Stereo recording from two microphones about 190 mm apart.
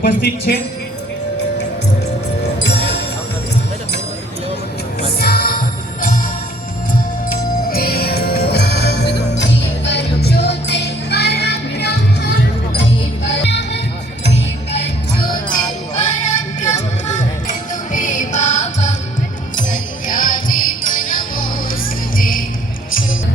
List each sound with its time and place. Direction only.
0.0 s a woman's voice: 50° left (ahead or behind)
5.2 s music: 50° left (ahead or behind)
7.3 s music: 50° left (ahead or behind)
13.4 s music: 65° left (ahead or behind)
15.3 s music: 45° left (ahead or behind)